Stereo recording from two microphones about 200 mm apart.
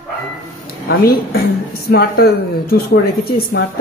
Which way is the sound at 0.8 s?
50° left (ahead or behind).